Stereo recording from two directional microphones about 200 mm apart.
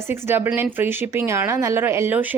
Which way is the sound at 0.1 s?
10° right (ahead or behind).